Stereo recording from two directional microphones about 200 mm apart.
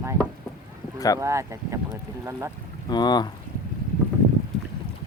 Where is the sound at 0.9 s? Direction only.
15° left (ahead or behind).